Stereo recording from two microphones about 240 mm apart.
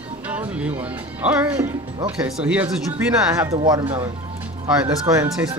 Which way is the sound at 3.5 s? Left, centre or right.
Centre.